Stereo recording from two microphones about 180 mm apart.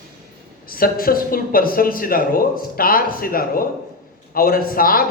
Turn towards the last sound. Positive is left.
turn(degrees=55)  # may be behind; listen again after turning